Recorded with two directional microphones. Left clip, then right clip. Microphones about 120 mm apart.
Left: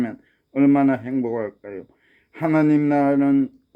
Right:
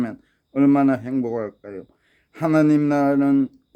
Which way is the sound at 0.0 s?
30° right (ahead or behind).